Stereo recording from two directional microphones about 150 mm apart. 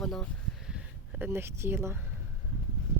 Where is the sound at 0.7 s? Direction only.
10° right (ahead or behind).